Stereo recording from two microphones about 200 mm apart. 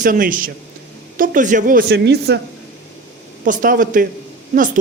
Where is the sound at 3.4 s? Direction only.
40° right (ahead or behind).